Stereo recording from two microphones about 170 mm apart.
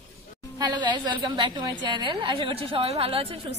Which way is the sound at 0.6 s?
25° right (ahead or behind).